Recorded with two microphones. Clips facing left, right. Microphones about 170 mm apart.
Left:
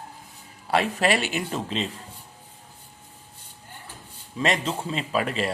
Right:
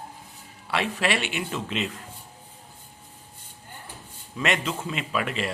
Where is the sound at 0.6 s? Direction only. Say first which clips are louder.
Left 4 dB; 40° left (ahead or behind).